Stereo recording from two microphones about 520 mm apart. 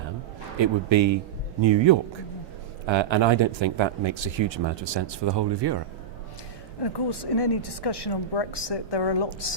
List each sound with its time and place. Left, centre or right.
0.6 s speech: right
6.8 s a woman's voice: left